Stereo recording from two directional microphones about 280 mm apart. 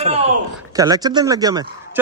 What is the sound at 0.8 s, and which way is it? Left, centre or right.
Speech, centre.